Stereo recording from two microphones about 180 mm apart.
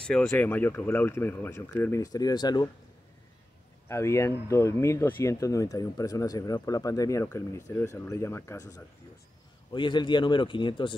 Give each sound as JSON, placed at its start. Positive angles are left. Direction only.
{"t": 0.0, "sound": "speech", "side_deg": 5}
{"t": 3.9, "sound": "speech", "side_deg": 15}